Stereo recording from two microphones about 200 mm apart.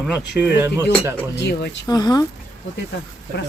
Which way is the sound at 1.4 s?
55° left (ahead or behind).